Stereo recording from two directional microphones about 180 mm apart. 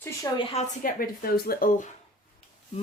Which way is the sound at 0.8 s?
55° left (ahead or behind).